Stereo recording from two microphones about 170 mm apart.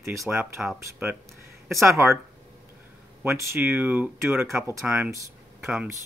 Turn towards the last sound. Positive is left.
turn(degrees=-5)  # may be behind; listen again after turning